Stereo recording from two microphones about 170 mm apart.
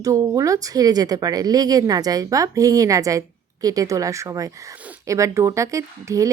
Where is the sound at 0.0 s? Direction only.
20° right (ahead or behind).